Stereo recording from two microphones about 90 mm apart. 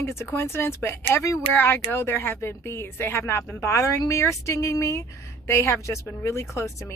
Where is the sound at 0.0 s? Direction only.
30° left (ahead or behind).